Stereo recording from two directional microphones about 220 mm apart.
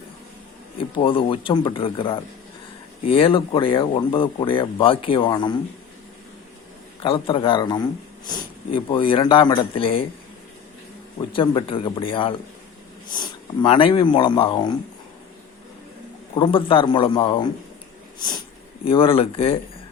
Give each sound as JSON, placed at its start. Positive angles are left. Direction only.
{"t": 0.8, "sound": "speech", "side_deg": 25}
{"t": 7.0, "sound": "speech", "side_deg": 25}
{"t": 11.2, "sound": "speech", "side_deg": 25}
{"t": 16.3, "sound": "speech", "side_deg": 25}
{"t": 18.2, "sound": "a sound", "side_deg": 20}
{"t": 18.9, "sound": "speech", "side_deg": 25}